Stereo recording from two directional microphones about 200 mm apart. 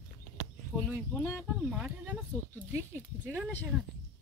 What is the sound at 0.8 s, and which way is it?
Speech, 5° left (ahead or behind).